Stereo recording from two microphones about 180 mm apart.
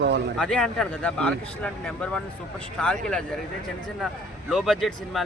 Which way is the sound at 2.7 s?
5° left (ahead or behind).